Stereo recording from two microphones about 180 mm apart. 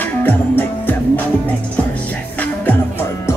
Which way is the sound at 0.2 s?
10° left (ahead or behind).